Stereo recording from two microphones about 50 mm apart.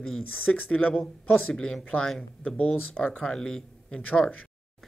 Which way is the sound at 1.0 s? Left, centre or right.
Centre.